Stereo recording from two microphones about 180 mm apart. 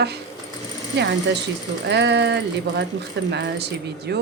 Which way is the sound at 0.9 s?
70° right (ahead or behind).